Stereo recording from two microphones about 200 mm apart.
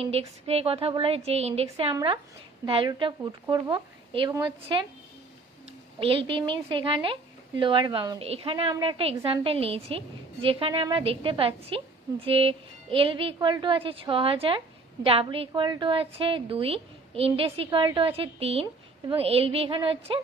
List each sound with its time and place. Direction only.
0.0 s a woman's voice: 30° right (ahead or behind)
5.9 s a woman's voice: 25° right (ahead or behind)